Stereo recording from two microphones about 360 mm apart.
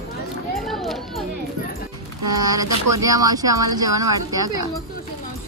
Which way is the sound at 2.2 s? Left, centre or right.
Right.